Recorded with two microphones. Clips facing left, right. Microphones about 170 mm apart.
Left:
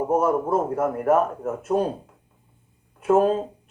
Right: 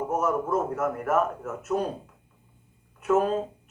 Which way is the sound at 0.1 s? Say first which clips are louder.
Left 5 dB; 30° left (ahead or behind).